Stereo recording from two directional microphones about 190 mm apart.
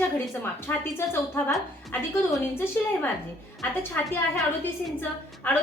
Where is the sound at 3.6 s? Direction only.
Centre (ahead or behind).